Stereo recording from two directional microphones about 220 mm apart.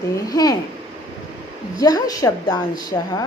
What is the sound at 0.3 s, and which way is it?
Speech, 15° left (ahead or behind).